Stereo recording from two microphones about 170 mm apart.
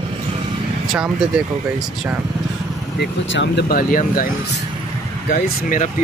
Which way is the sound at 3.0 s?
90° left.